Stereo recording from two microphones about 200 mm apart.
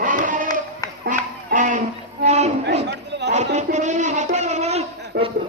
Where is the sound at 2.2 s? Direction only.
35° right (ahead or behind).